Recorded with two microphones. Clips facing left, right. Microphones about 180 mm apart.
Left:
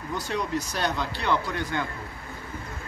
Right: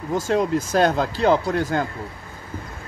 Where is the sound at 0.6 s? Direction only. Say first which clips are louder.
Right 9 dB; 45° right (ahead or behind).